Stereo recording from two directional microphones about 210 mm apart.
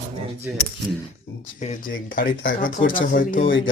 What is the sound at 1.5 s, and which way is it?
Speech, 35° left (ahead or behind).